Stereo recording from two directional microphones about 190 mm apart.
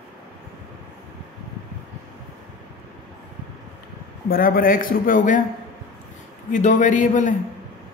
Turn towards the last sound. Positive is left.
turn(degrees=40)  # may be behind; listen again after turning